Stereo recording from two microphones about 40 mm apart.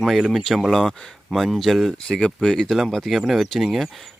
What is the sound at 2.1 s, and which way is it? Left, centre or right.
Speech, left.